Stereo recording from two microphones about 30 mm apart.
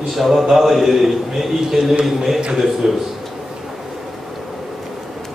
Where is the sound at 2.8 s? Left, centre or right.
Centre.